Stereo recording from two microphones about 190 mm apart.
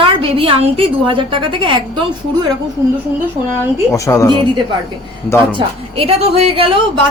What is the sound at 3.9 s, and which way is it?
Speech, 15° left (ahead or behind).